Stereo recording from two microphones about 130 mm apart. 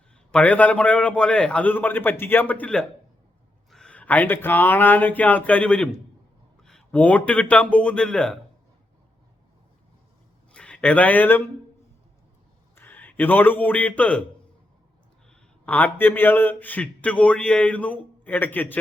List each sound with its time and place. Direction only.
0.3 s a man's voice: 10° left (ahead or behind)
10.5 s speech: 5° left (ahead or behind)
12.7 s a man's voice: 15° left (ahead or behind)
15.3 s a man's voice: 10° left (ahead or behind)